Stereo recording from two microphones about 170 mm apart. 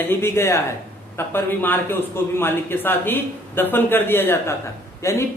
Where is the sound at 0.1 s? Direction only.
15° left (ahead or behind).